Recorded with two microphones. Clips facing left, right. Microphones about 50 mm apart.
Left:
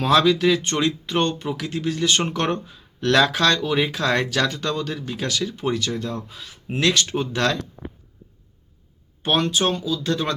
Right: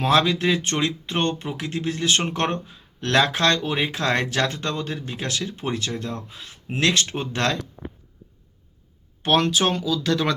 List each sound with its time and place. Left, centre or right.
0.0 s speech: right
9.2 s speech: right
9.5 s speech: right